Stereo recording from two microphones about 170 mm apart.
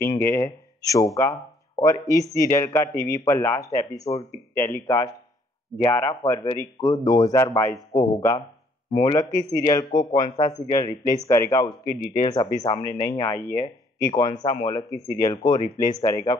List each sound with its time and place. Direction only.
0.2 s a man's voice: 15° left (ahead or behind)